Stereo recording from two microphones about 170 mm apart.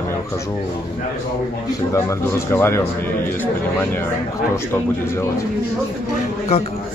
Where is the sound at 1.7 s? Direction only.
15° left (ahead or behind).